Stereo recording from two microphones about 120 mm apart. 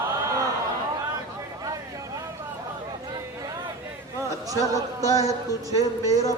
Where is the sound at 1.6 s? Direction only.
30° right (ahead or behind).